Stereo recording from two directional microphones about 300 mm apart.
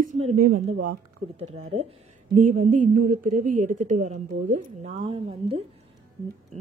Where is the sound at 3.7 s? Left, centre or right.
Right.